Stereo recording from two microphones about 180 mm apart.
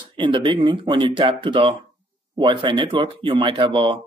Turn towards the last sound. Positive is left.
turn(degrees=-25)  # may be behind; listen again after turning